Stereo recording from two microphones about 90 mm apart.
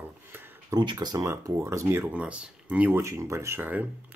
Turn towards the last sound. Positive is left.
turn(degrees=-20)  # may be behind; listen again after turning